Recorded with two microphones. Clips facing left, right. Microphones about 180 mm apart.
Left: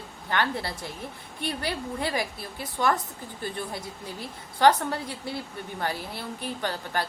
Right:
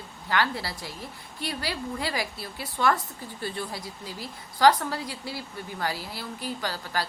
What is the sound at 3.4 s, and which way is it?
A woman's voice, 20° left (ahead or behind).